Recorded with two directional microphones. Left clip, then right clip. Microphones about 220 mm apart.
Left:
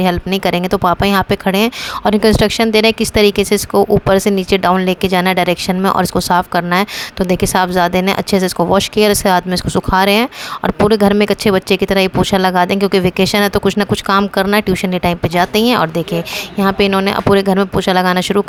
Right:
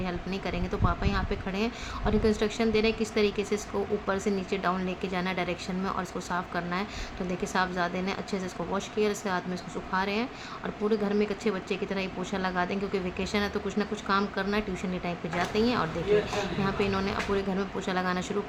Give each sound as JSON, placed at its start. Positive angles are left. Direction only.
{"t": 0.0, "sound": "speech", "side_deg": 50}